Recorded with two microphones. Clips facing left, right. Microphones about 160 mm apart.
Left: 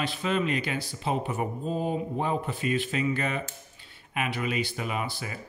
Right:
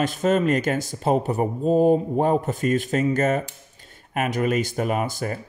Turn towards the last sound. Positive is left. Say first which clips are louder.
# right 8 dB
turn(degrees=-45)  # may be behind; listen again after turning